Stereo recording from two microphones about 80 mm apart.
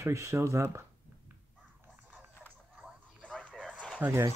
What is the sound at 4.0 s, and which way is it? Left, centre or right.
Speech, right.